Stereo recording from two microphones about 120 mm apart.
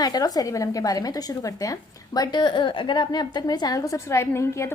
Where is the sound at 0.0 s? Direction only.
30° left (ahead or behind).